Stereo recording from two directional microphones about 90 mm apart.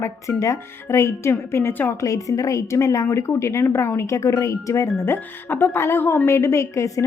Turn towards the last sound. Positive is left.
turn(degrees=35)  # may be behind; listen again after turning